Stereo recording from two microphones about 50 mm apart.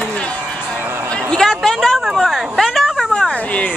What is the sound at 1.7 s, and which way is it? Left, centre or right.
Speech, centre.